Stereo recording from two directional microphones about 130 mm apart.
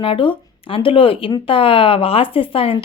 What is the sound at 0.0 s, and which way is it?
A woman's voice, 40° left (ahead or behind).